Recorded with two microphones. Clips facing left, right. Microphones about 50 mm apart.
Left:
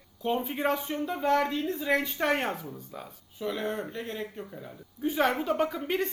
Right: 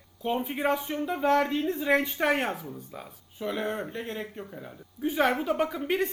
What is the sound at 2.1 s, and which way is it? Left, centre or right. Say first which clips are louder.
A woman's voice: right 1 dB; centre.